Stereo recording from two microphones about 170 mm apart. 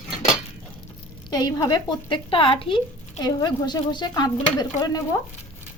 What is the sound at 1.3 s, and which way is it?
Speech, 25° left (ahead or behind).